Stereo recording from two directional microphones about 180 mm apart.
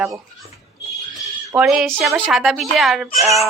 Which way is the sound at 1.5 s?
5° right (ahead or behind).